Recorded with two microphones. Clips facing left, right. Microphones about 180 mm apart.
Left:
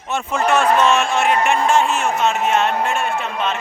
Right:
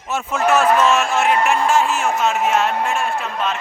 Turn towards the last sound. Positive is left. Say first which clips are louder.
# left 1 dB
turn(degrees=0)  # may be behind; listen again after turning